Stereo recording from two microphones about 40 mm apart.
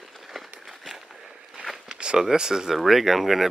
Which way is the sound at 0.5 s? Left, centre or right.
Centre.